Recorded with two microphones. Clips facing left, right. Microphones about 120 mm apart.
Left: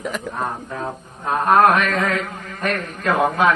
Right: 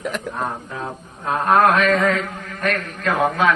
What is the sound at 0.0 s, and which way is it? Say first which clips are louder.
A man's voice: even; centre (ahead or behind).